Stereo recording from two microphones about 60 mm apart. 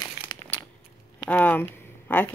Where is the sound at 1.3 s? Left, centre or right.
Left.